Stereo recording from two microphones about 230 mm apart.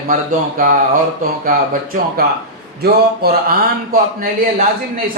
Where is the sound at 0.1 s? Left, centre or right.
Right.